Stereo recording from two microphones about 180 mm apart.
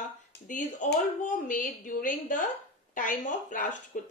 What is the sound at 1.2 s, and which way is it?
A woman's voice, 45° left (ahead or behind).